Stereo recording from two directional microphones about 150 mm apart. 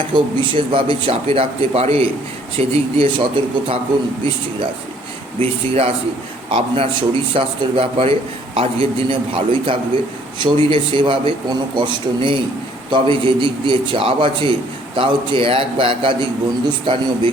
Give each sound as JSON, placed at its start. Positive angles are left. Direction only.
{"t": 0.1, "sound": "a man's voice", "side_deg": -35}
{"t": 5.4, "sound": "a man's voice", "side_deg": -40}